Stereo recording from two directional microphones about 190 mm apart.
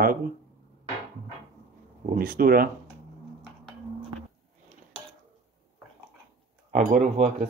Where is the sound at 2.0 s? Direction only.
50° right (ahead or behind).